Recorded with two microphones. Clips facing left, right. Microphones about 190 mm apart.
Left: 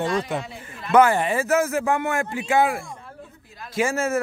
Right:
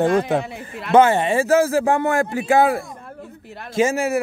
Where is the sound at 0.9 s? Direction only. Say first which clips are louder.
Right 3 dB; 25° right (ahead or behind).